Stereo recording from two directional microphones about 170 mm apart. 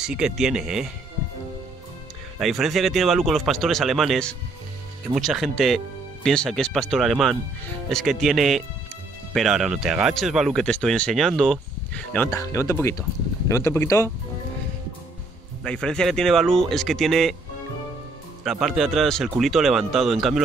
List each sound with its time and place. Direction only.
0.0 s speech: 5° right (ahead or behind)
2.3 s speech: centre (ahead or behind)
12.3 s speech: 20° left (ahead or behind)
15.6 s speech: 5° left (ahead or behind)
18.4 s speech: centre (ahead or behind)